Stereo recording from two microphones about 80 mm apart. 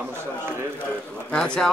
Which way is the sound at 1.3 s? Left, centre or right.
Centre.